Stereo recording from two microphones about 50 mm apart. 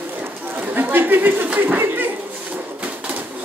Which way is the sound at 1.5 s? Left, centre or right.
Right.